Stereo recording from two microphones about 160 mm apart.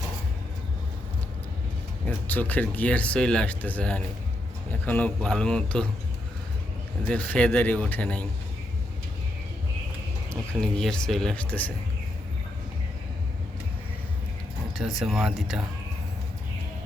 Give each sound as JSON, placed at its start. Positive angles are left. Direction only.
{"t": 2.0, "sound": "speech", "side_deg": 10}
{"t": 7.1, "sound": "speech", "side_deg": 10}
{"t": 10.6, "sound": "speech", "side_deg": 5}
{"t": 14.8, "sound": "speech", "side_deg": 0}